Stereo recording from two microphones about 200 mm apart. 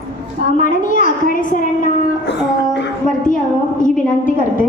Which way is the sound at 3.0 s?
40° left (ahead or behind).